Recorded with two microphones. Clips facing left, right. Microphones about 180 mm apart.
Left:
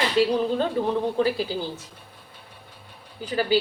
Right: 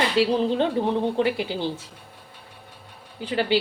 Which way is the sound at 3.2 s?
25° right (ahead or behind).